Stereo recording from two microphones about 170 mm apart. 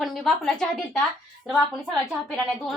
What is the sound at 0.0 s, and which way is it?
A woman's voice, centre (ahead or behind).